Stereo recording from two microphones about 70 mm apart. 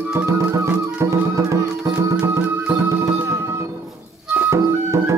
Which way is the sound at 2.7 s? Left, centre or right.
Right.